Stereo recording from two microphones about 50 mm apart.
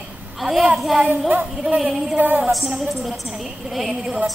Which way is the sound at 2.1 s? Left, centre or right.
Right.